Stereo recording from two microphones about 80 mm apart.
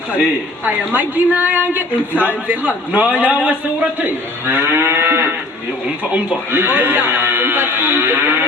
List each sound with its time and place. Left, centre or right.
0.9 s a man's voice: centre